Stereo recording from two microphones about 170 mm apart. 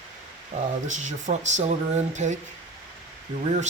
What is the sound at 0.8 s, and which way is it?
Speech, 45° right (ahead or behind).